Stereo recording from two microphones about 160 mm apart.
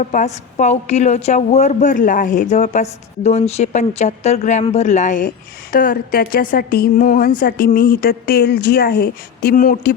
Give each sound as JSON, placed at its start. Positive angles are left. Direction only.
{"t": 0.0, "sound": "a woman's voice", "side_deg": 50}